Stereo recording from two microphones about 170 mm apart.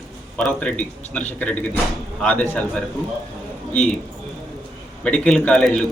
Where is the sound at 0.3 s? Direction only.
5° left (ahead or behind).